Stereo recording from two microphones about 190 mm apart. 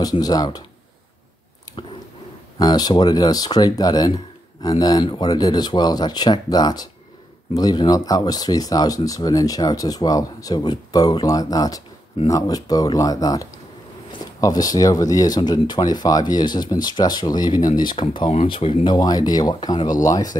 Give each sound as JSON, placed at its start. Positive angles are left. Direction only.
{"t": 0.0, "sound": "speech", "side_deg": 20}
{"t": 2.6, "sound": "speech", "side_deg": 20}